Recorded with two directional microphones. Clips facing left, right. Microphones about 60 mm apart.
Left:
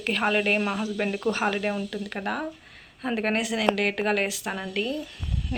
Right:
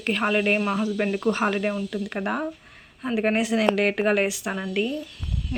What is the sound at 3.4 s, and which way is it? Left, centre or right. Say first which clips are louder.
Speech: right 3 dB; right.